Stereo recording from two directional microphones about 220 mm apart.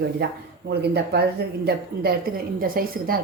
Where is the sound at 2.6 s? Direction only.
40° right (ahead or behind).